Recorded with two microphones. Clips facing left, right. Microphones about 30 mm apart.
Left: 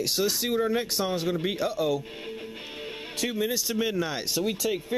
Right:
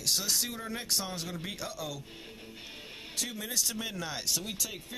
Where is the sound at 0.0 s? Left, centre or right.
Centre.